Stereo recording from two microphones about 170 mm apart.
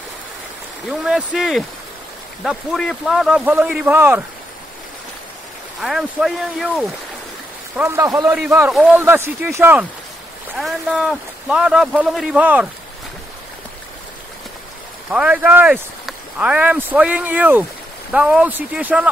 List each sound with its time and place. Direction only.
0.8 s speech: 5° right (ahead or behind)
5.8 s speech: centre (ahead or behind)
7.7 s speech: 10° right (ahead or behind)
8.4 s speech: 5° right (ahead or behind)
10.6 s speech: centre (ahead or behind)
15.0 s speech: 5° right (ahead or behind)